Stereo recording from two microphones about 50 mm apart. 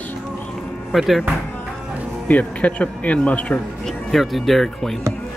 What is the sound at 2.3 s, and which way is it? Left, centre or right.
Speech, left.